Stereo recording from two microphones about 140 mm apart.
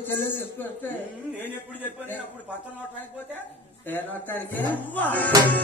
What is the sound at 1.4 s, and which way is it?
Music, 15° left (ahead or behind).